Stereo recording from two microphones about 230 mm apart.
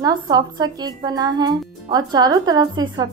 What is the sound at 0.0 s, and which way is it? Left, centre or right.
Speech, centre.